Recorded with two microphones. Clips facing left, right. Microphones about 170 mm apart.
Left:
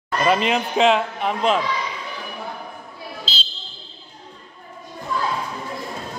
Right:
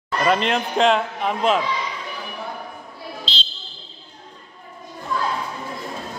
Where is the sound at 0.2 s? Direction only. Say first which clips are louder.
Left 1 dB; 5° left (ahead or behind).